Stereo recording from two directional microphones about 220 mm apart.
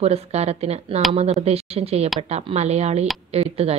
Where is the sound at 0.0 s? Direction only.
30° right (ahead or behind).